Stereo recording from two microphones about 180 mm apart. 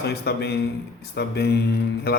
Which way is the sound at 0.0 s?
65° left (ahead or behind).